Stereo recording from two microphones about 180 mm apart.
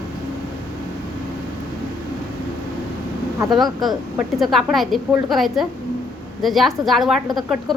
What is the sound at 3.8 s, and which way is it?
A woman's voice, centre (ahead or behind).